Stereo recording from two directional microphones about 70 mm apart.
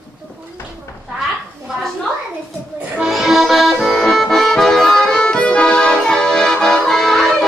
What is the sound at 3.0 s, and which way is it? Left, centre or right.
Accordion, centre.